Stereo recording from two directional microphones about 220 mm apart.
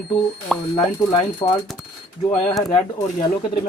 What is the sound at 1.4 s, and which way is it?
Speech, 20° left (ahead or behind).